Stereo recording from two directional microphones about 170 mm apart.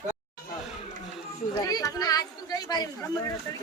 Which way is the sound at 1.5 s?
20° left (ahead or behind).